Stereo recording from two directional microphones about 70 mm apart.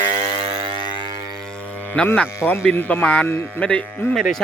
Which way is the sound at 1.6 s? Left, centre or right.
Left.